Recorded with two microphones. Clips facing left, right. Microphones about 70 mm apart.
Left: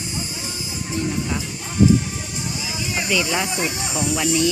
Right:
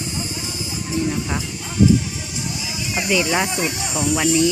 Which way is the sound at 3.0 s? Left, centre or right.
Right.